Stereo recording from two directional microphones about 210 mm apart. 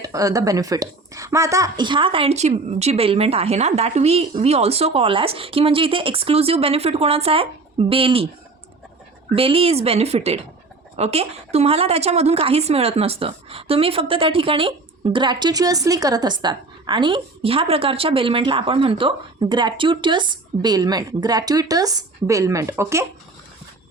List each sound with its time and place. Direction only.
0.0 s a woman's voice: 15° right (ahead or behind)
9.3 s a woman's voice: 25° right (ahead or behind)